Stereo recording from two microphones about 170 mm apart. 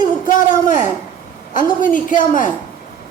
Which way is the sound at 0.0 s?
50° left (ahead or behind).